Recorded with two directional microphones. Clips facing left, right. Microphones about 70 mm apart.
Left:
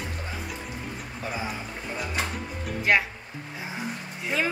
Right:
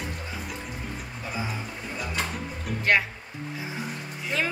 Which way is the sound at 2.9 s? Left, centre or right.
Centre.